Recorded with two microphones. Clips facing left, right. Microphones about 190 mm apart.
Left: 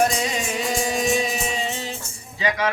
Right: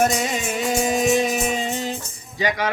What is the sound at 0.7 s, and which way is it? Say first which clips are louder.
Music: right 4 dB; 50° right (ahead or behind).